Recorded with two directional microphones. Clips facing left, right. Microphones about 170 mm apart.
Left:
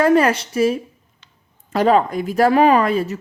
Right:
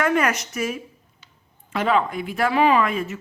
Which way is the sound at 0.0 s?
30° left (ahead or behind).